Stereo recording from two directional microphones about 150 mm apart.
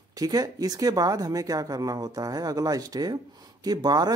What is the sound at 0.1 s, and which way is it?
Speech, 25° right (ahead or behind).